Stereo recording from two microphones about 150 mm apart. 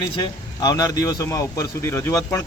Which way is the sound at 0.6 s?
25° left (ahead or behind).